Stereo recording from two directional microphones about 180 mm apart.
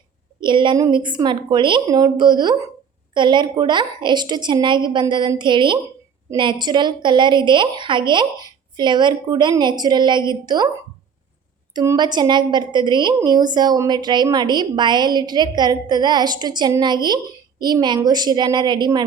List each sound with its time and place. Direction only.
0.3 s a woman's voice: 25° right (ahead or behind)
11.7 s a woman's voice: 20° right (ahead or behind)